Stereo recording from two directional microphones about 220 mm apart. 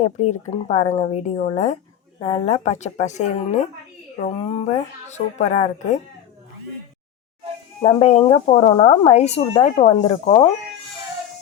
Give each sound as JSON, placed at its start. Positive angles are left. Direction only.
{"t": 0.0, "sound": "speech", "side_deg": 35}
{"t": 7.8, "sound": "speech", "side_deg": 25}